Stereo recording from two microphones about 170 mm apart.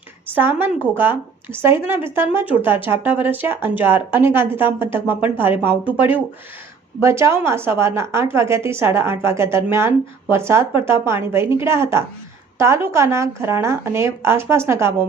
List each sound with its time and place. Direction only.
0.3 s speech: 10° right (ahead or behind)